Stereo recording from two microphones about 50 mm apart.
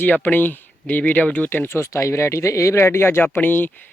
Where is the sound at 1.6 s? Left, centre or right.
Left.